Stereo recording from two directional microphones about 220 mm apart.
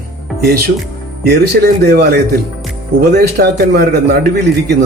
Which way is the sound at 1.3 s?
45° right (ahead or behind).